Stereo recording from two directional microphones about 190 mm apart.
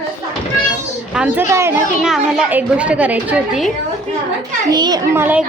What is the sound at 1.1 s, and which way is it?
Speech, 10° right (ahead or behind).